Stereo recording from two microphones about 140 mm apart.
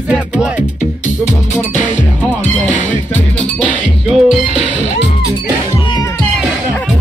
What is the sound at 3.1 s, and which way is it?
Music, 10° left (ahead or behind).